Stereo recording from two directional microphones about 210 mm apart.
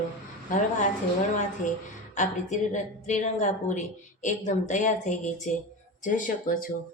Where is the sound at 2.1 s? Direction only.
35° left (ahead or behind).